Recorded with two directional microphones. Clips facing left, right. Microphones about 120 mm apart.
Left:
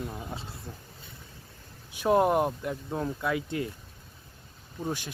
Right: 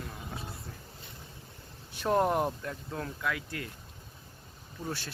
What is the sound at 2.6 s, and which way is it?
Speech, 15° left (ahead or behind).